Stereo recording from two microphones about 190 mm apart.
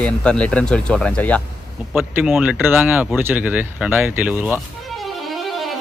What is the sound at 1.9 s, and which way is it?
Speech, 5° right (ahead or behind).